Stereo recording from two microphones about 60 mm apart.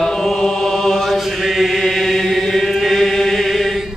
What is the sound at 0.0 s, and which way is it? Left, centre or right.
Mantra, centre.